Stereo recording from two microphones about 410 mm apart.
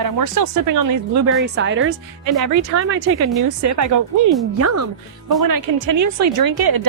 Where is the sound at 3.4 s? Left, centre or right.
Right.